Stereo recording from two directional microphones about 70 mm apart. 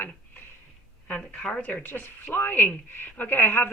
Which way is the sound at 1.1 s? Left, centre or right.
Centre.